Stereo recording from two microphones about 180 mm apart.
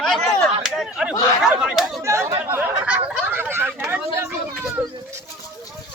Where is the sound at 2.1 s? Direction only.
15° right (ahead or behind).